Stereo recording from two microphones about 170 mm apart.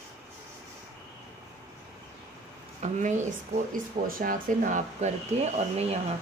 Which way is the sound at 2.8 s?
45° right (ahead or behind).